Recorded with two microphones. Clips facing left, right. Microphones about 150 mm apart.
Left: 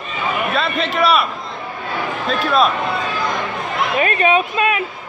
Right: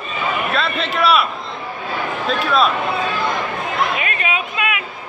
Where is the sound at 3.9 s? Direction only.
40° left (ahead or behind).